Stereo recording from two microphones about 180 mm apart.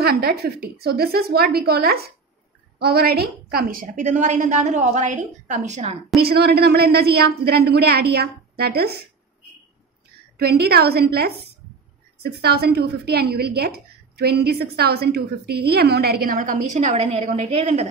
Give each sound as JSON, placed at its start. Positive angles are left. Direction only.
{"t": 0.0, "sound": "a woman's voice", "side_deg": -60}
{"t": 6.1, "sound": "a woman's voice", "side_deg": -60}
{"t": 10.4, "sound": "a woman's voice", "side_deg": -60}